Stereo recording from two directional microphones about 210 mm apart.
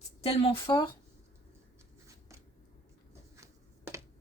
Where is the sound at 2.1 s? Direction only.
15° right (ahead or behind).